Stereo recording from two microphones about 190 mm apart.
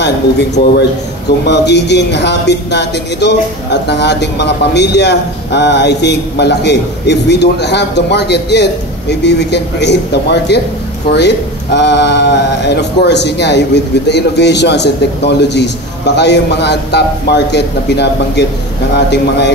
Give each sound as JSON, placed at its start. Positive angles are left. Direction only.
{"t": 0.0, "sound": "a man's voice", "side_deg": 60}